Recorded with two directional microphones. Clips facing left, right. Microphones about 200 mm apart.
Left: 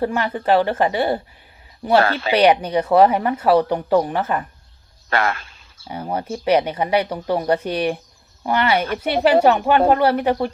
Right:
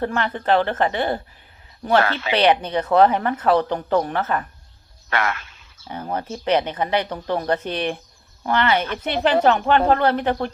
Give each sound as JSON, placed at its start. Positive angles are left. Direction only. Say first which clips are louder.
{"t": 0.0, "sound": "speech", "louder": "left 2 dB", "side_deg": 10}
{"t": 2.0, "sound": "speech", "louder": "left 3 dB", "side_deg": 35}
{"t": 2.3, "sound": "speech", "louder": "left 3 dB", "side_deg": 10}
{"t": 5.0, "sound": "a sound", "louder": "left 3 dB", "side_deg": 35}
{"t": 5.9, "sound": "speech", "louder": "left 2 dB", "side_deg": 10}